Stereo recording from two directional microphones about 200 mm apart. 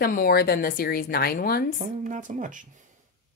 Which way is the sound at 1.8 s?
40° right (ahead or behind).